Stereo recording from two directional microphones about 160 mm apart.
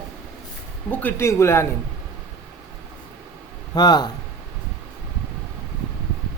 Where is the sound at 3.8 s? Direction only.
25° left (ahead or behind).